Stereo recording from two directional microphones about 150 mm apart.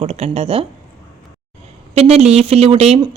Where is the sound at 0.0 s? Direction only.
45° right (ahead or behind).